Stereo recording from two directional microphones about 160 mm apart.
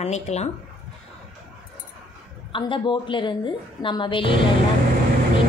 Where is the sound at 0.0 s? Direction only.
45° left (ahead or behind).